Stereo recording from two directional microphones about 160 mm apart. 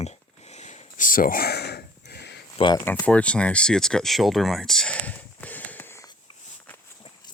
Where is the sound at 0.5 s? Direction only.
50° left (ahead or behind); by 2.3 s 90° left.